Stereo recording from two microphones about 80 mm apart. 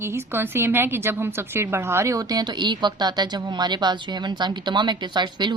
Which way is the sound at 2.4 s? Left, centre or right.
Right.